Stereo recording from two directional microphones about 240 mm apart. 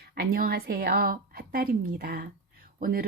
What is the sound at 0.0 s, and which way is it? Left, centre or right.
A woman's voice, right.